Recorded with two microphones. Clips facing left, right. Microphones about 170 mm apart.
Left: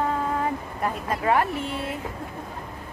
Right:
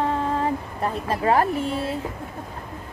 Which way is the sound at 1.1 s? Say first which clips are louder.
Right 3 dB; 35° right (ahead or behind).